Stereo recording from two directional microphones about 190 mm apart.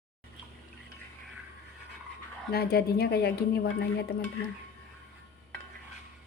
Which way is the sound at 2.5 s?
55° left (ahead or behind).